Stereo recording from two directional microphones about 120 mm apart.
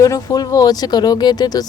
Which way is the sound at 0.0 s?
30° left (ahead or behind).